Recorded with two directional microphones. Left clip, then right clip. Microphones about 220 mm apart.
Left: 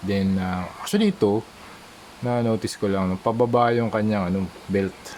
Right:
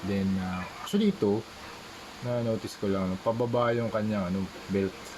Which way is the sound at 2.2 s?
35° left (ahead or behind).